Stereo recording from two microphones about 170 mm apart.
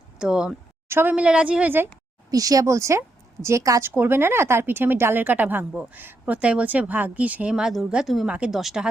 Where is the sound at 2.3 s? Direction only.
20° right (ahead or behind).